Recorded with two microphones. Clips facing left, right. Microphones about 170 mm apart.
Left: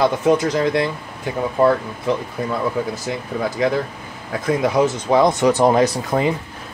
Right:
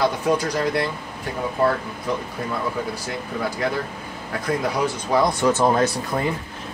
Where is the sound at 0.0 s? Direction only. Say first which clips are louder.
Left 5 dB; 25° left (ahead or behind).